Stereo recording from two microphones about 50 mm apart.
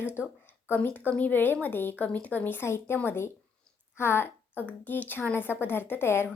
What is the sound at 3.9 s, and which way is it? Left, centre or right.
A woman's voice, left.